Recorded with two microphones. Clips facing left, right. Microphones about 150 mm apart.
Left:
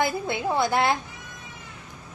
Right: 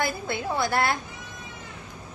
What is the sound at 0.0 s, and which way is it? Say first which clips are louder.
Speech: left 3 dB; 15° left (ahead or behind).